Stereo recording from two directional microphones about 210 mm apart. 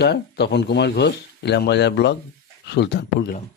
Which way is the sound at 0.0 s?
50° left (ahead or behind).